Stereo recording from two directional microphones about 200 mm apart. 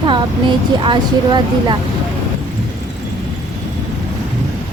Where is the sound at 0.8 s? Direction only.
25° right (ahead or behind).